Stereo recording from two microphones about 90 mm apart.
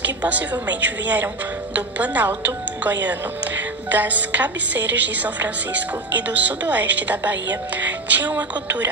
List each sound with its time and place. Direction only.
0.0 s speech: 15° right (ahead or behind)